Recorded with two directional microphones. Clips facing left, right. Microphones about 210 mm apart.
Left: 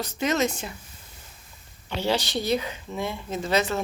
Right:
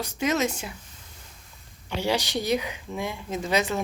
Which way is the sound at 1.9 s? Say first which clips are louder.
Even; 15° right (ahead or behind).